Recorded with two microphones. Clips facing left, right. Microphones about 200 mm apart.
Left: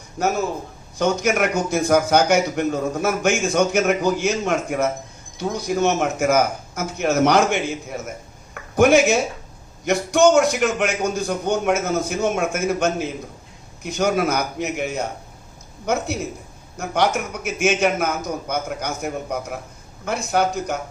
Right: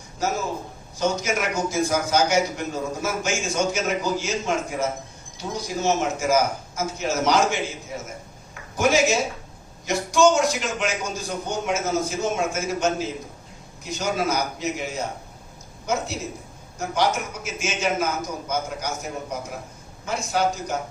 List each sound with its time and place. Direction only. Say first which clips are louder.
0.2 s a man's voice: left 4 dB; 60° left (ahead or behind)
16.7 s a man's voice: left 3 dB; 60° left (ahead or behind)
20.1 s a man's voice: left 3 dB; 60° left (ahead or behind)